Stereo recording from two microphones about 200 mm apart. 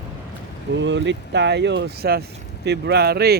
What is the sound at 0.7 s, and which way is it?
Speech, 65° right (ahead or behind).